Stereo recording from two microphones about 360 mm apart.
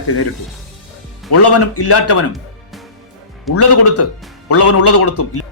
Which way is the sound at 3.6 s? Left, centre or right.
Left.